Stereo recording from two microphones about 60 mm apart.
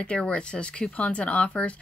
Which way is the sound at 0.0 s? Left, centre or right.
Left.